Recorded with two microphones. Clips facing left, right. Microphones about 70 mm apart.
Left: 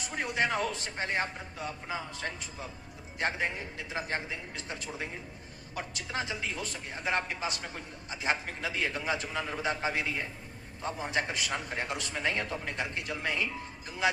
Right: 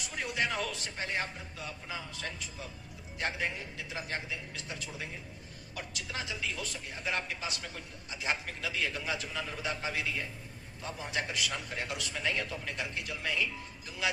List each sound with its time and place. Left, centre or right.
0.0 s a man's voice: left